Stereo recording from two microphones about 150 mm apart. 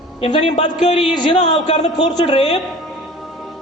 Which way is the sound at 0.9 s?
30° left (ahead or behind).